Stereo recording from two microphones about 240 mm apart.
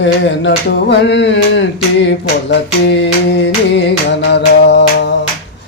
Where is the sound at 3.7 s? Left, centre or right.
Left.